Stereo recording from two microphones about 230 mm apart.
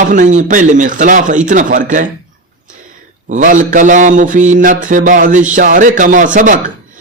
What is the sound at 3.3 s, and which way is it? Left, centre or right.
A man's voice, right.